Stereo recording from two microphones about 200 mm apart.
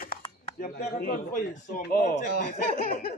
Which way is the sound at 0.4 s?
45° left (ahead or behind).